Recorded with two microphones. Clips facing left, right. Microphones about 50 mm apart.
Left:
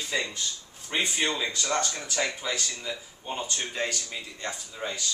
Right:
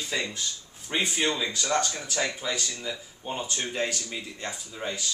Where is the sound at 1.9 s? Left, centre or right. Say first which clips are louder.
Even; centre.